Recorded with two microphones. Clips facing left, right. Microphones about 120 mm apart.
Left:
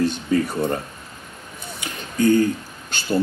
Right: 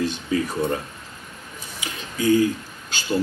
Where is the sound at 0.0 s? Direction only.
55° left (ahead or behind).